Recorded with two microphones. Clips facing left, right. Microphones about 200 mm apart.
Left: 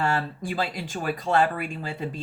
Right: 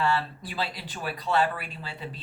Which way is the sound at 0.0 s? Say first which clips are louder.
Left 1 dB; 45° left (ahead or behind).